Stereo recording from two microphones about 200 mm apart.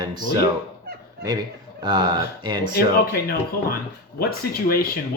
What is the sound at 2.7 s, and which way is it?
Speech, 50° left (ahead or behind).